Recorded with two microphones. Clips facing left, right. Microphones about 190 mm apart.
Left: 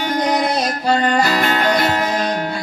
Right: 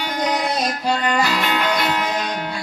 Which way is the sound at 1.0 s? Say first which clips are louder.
Left 4 dB; 40° left (ahead or behind).